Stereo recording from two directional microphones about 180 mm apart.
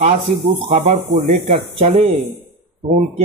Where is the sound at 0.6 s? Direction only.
35° right (ahead or behind).